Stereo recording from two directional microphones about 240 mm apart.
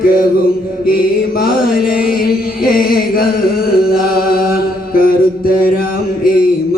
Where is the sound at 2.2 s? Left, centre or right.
Left.